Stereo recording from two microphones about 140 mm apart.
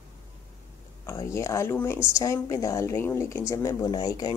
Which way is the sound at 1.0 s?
20° left (ahead or behind).